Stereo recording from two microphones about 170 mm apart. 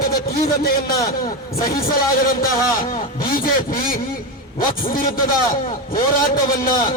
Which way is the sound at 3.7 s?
55° left (ahead or behind).